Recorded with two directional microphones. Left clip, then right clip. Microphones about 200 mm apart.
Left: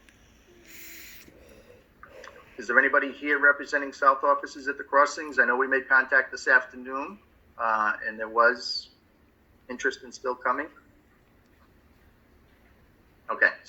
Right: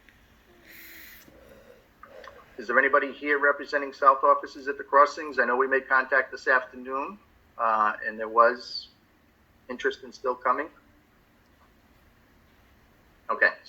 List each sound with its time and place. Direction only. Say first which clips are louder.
0.6 s owl: left 1 dB; 50° right (ahead or behind)
2.2 s speech: left 1 dB; 10° left (ahead or behind)
9.6 s speech: even; 10° left (ahead or behind)
13.2 s a sound: even; 10° left (ahead or behind)